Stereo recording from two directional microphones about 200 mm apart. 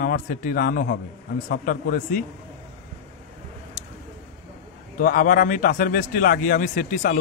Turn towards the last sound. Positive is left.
turn(degrees=40)  # may be behind; listen again after turning